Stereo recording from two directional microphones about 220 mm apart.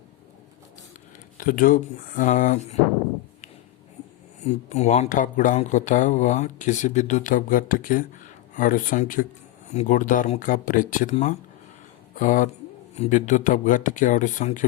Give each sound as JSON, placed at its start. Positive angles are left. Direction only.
{"t": 1.4, "sound": "speech", "side_deg": 40}
{"t": 4.4, "sound": "speech", "side_deg": 30}